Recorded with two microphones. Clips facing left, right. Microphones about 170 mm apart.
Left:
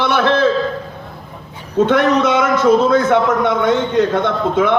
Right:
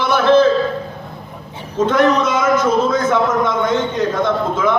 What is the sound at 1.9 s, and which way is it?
A man's voice, 65° left (ahead or behind).